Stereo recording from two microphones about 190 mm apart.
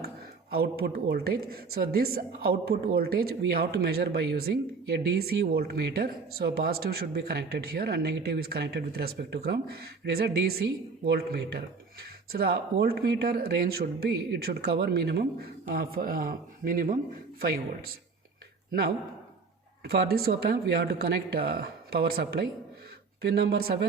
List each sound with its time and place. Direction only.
0.5 s speech: 55° right (ahead or behind)
19.8 s speech: 55° right (ahead or behind)